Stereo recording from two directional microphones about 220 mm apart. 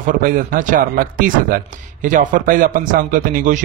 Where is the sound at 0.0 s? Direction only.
40° right (ahead or behind).